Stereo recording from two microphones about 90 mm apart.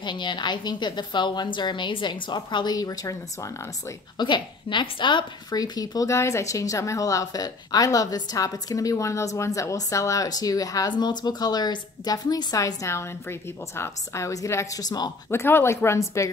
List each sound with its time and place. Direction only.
0.0 s a woman's voice: 60° left (ahead or behind); by 3.9 s 35° left (ahead or behind)
4.2 s a woman's voice: 60° left (ahead or behind)
5.6 s a woman's voice: 45° left (ahead or behind)
15.2 s speech: 25° left (ahead or behind)